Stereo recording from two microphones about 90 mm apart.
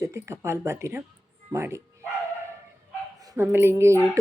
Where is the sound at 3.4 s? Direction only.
25° right (ahead or behind).